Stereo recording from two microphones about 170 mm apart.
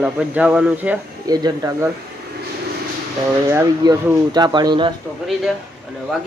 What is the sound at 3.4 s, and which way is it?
Speech, 20° right (ahead or behind).